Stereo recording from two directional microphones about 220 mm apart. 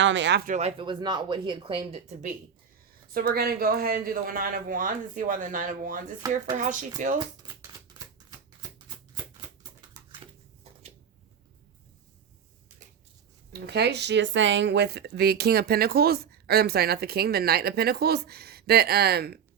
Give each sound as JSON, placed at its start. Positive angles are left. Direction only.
{"t": 0.0, "sound": "speech", "side_deg": -55}
{"t": 0.5, "sound": "speech", "side_deg": -25}
{"t": 3.1, "sound": "speech", "side_deg": -45}
{"t": 10.0, "sound": "dog", "side_deg": -15}
{"t": 13.5, "sound": "speech", "side_deg": -50}